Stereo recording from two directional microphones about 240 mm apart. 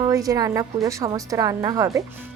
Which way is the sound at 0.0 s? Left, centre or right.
Centre.